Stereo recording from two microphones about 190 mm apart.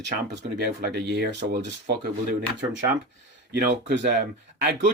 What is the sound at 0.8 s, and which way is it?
Speech, 60° right (ahead or behind).